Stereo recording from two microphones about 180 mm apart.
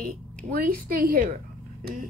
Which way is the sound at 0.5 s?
55° right (ahead or behind).